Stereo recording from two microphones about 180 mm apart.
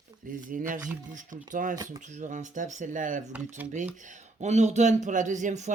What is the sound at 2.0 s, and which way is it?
Speech, 45° right (ahead or behind).